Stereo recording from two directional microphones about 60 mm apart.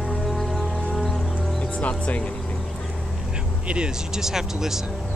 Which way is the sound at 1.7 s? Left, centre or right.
Left.